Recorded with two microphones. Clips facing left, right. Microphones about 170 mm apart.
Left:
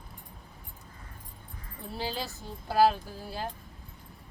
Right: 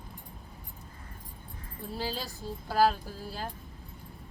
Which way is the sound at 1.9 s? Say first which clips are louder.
Left 1 dB; 20° left (ahead or behind).